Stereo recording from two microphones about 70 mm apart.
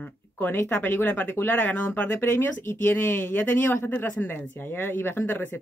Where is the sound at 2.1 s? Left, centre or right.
Left.